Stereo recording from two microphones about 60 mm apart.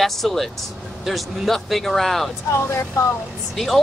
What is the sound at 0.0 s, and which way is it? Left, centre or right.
Speech, centre.